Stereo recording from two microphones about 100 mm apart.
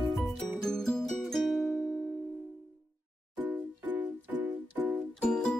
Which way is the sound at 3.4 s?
15° right (ahead or behind).